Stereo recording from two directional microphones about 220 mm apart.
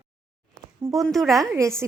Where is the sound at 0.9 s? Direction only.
Centre (ahead or behind).